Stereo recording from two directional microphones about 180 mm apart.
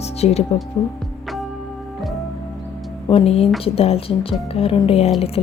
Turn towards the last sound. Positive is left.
turn(degrees=35)  # may be behind; listen again after turning